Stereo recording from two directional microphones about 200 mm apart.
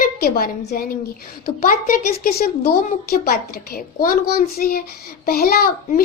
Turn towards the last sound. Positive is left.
turn(degrees=50)  # may be behind; listen again after turning